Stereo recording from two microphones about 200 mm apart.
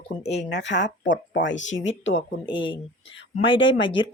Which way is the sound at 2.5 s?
25° left (ahead or behind).